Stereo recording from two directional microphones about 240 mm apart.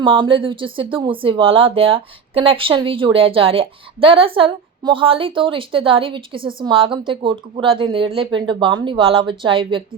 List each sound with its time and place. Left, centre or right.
0.0 s speech: right